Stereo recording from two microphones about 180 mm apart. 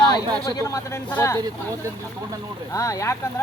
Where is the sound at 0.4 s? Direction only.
20° left (ahead or behind).